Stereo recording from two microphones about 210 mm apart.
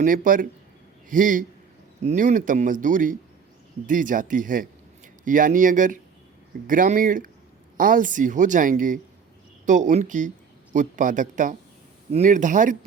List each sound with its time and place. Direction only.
0.0 s speech: 40° right (ahead or behind)